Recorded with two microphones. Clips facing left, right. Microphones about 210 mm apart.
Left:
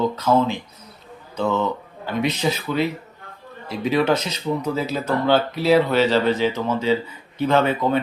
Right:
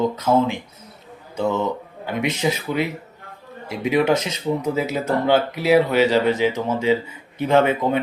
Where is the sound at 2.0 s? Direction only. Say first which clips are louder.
Even; 20° right (ahead or behind).